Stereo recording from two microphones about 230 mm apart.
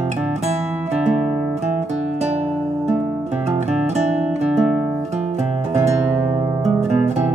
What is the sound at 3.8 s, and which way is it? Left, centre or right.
Music, right.